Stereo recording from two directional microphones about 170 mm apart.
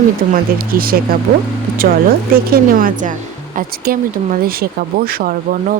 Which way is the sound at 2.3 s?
60° right (ahead or behind).